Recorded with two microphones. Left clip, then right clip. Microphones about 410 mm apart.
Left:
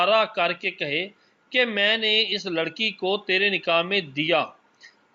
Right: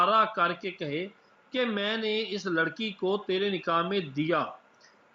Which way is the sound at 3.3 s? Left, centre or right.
Left.